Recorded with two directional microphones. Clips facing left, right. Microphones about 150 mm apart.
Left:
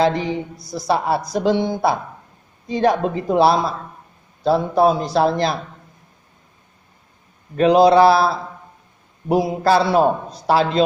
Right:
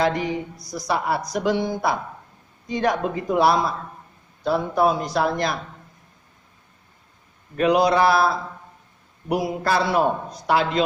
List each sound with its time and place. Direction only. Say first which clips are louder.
0.0 s a man's voice: left 4 dB; 30° left (ahead or behind)
7.5 s a man's voice: left 6 dB; 30° left (ahead or behind)